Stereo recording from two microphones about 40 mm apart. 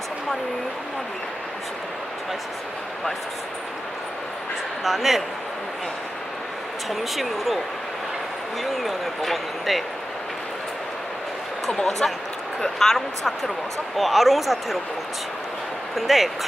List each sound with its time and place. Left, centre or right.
4.8 s speech: centre
7.2 s speech: centre
8.6 s speech: centre
11.6 s speech: centre
16.0 s speech: centre